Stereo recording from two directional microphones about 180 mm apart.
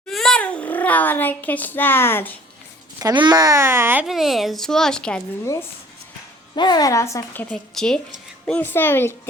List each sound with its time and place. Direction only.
0.1 s a child's voice: centre (ahead or behind)
3.0 s a child's voice: 25° right (ahead or behind)
4.0 s a woman's voice: centre (ahead or behind)
6.6 s a woman's voice: 20° left (ahead or behind)